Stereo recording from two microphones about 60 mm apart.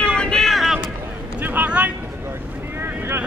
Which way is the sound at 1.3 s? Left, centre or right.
Right.